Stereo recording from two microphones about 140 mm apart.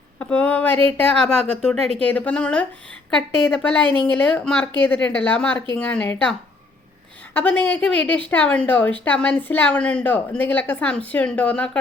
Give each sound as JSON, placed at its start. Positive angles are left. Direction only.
{"t": 0.2, "sound": "speech", "side_deg": 10}
{"t": 1.8, "sound": "speech", "side_deg": -45}
{"t": 2.0, "sound": "a woman's voice", "side_deg": 10}
{"t": 7.3, "sound": "a woman's voice", "side_deg": 10}